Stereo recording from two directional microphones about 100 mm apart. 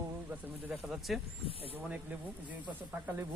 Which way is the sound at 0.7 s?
Centre (ahead or behind).